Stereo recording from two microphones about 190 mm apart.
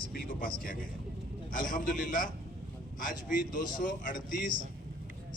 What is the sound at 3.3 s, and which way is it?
A man's voice, 45° left (ahead or behind).